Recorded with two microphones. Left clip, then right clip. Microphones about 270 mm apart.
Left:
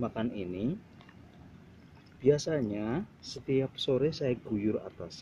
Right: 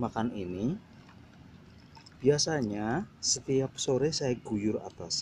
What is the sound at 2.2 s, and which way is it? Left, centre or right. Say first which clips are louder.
Speech: even; centre.